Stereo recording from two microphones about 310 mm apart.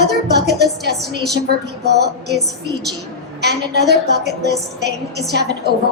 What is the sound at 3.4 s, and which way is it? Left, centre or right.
Speech, right.